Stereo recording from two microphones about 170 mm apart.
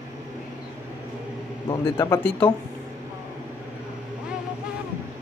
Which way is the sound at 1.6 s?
15° left (ahead or behind).